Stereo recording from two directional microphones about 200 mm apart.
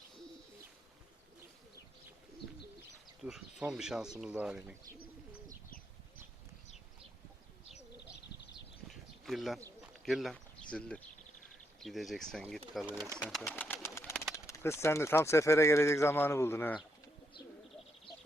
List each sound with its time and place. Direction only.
3.2 s speech: 5° right (ahead or behind)
8.9 s bird: centre (ahead or behind)
9.6 s bird: 15° right (ahead or behind)
10.1 s speech: centre (ahead or behind)